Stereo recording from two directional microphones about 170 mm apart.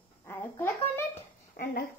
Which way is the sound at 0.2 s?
15° left (ahead or behind).